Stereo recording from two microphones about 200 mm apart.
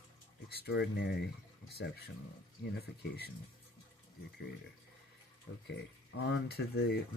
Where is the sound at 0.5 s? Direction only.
55° left (ahead or behind).